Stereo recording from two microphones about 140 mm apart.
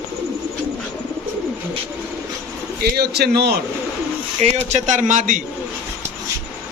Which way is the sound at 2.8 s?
90° right.